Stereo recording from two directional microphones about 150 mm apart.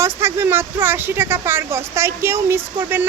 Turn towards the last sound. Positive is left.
turn(degrees=-15)  # may be behind; listen again after turning